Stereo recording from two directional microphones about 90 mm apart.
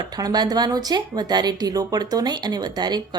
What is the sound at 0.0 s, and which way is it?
A woman's voice, 45° right (ahead or behind).